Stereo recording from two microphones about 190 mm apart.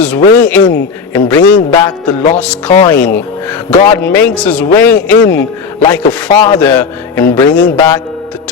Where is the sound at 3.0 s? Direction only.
50° left (ahead or behind).